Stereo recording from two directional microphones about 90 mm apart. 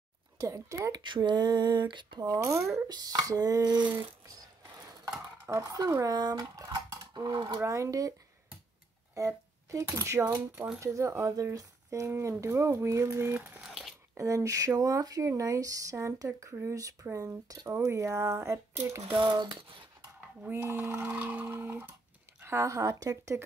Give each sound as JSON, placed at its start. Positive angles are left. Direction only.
{"t": 0.4, "sound": "speech", "side_deg": -35}
{"t": 0.9, "sound": "a sound", "side_deg": -60}
{"t": 2.2, "sound": "speech", "side_deg": -35}
{"t": 2.9, "sound": "speech", "side_deg": -45}
{"t": 5.5, "sound": "speech", "side_deg": -40}
{"t": 6.0, "sound": "speech", "side_deg": -50}
{"t": 6.6, "sound": "speech", "side_deg": -40}
{"t": 9.1, "sound": "speech", "side_deg": -35}
{"t": 13.6, "sound": "a sound", "side_deg": 0}
{"t": 14.1, "sound": "speech", "side_deg": -35}
{"t": 19.1, "sound": "a sound", "side_deg": -60}
{"t": 20.4, "sound": "a sound", "side_deg": -25}
{"t": 22.4, "sound": "speech", "side_deg": -30}